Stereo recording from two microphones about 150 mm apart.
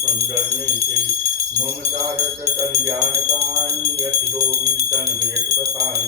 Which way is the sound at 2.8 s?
20° right (ahead or behind).